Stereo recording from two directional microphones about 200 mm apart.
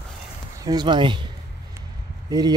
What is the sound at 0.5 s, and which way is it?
Speech, 20° right (ahead or behind).